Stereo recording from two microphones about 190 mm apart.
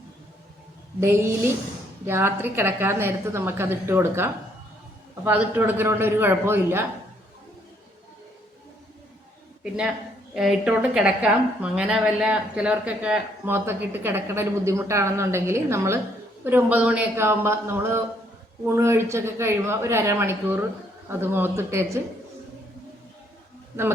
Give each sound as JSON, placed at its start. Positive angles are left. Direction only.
{"t": 0.9, "sound": "a woman's voice", "side_deg": -10}
{"t": 10.3, "sound": "a woman's voice", "side_deg": -5}